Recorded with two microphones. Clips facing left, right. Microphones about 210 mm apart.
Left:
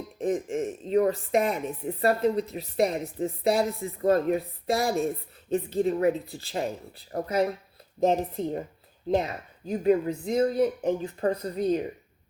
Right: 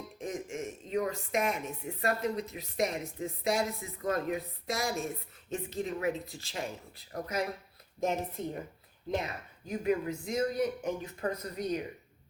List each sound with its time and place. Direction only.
0.2 s speech: 35° left (ahead or behind)